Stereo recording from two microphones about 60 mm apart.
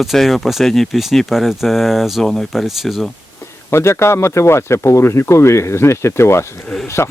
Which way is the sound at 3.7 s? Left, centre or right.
Left.